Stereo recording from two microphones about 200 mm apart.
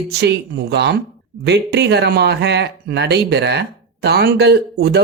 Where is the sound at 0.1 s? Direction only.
55° right (ahead or behind).